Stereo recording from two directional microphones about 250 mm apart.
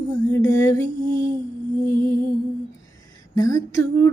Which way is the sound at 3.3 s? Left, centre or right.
Centre.